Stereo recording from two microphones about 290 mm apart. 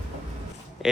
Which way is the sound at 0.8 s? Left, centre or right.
Centre.